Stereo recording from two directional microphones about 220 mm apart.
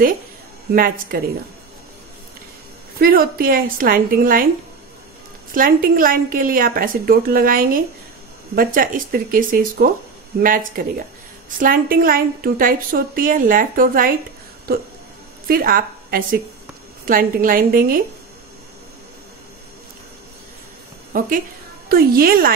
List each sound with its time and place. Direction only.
0.7 s a woman's voice: 40° right (ahead or behind)
3.0 s a woman's voice: 40° right (ahead or behind)
5.5 s a woman's voice: 40° right (ahead or behind)
21.1 s a woman's voice: 40° right (ahead or behind)